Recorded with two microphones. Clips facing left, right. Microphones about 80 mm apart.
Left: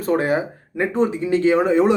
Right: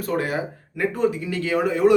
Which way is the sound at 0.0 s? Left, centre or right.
Left.